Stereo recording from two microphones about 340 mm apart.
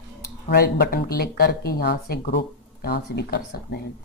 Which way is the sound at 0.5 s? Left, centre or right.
Left.